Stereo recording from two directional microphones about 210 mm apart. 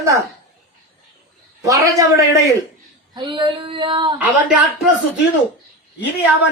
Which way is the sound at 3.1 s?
20° right (ahead or behind).